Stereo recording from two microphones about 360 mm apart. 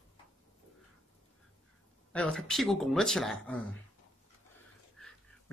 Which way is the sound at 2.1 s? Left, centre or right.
Centre.